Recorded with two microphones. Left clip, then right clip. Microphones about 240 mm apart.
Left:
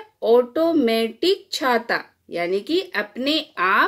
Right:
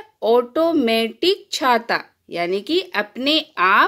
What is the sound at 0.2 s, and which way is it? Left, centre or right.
Speech, right.